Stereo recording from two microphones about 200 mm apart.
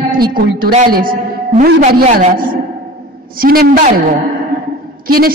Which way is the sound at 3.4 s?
45° right (ahead or behind).